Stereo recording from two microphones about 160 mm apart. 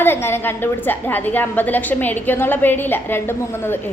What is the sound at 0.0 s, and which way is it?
A woman's voice, 15° left (ahead or behind).